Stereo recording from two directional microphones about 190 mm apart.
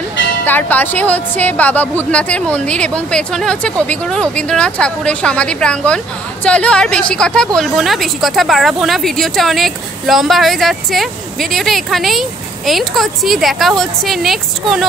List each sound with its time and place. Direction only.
0.5 s a woman's voice: 10° left (ahead or behind)